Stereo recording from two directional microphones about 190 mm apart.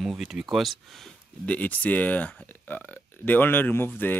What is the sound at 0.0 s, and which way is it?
Speech, centre (ahead or behind).